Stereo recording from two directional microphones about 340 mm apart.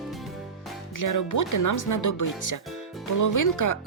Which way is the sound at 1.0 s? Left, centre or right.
Left.